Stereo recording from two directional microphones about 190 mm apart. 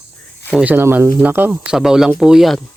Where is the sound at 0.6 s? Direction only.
10° right (ahead or behind).